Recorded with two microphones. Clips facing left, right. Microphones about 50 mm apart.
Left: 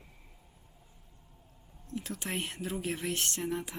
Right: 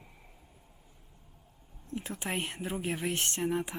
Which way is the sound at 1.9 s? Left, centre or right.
Right.